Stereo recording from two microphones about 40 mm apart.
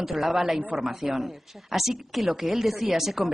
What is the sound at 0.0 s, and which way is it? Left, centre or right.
Speech, centre.